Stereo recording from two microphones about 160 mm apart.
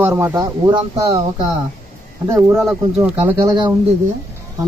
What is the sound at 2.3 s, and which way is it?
Speech, 15° right (ahead or behind).